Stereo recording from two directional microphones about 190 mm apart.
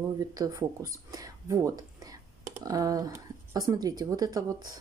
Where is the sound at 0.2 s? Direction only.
20° right (ahead or behind).